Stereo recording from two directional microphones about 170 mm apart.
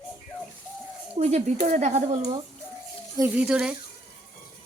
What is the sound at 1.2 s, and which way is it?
Speech, 40° right (ahead or behind).